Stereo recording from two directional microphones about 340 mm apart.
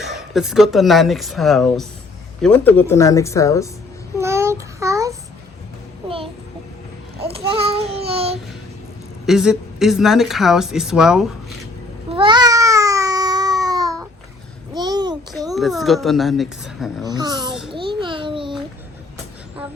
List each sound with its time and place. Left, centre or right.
0.0 s speech: centre
4.2 s child singing: centre
7.3 s child singing: centre
9.2 s speech: centre
12.1 s a sound: centre
15.5 s speech: centre
17.0 s a child's voice: centre
18.0 s babbling: centre